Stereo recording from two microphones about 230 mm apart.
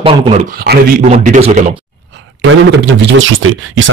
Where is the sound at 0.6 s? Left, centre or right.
Right.